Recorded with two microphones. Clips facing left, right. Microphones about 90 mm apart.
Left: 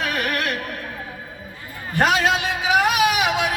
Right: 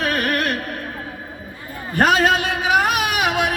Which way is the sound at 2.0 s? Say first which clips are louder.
Right 3 dB; 40° right (ahead or behind).